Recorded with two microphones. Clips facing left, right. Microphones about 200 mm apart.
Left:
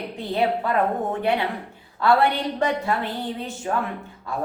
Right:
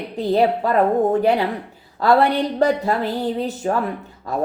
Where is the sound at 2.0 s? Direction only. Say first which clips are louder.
Right 4 dB; 40° right (ahead or behind).